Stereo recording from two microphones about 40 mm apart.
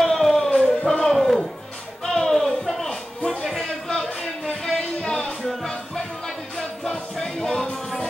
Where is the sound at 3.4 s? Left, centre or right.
Centre.